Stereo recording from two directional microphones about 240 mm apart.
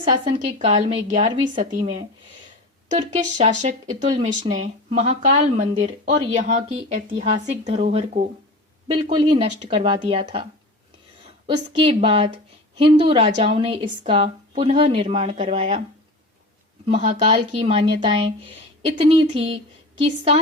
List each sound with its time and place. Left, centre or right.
0.6 s speech: right
2.9 s speech: right
11.4 s speech: right
16.8 s speech: right